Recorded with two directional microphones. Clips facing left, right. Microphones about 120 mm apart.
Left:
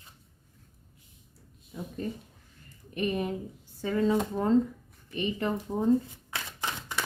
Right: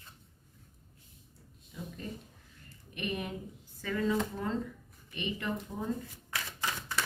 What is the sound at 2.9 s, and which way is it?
Speech, 35° left (ahead or behind).